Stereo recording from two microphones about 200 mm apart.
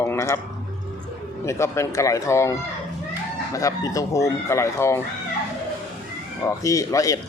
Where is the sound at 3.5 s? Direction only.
15° left (ahead or behind).